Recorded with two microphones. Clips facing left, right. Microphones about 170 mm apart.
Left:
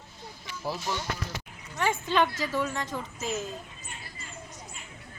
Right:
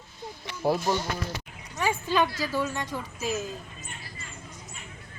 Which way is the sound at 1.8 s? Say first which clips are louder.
Even; 10° right (ahead or behind).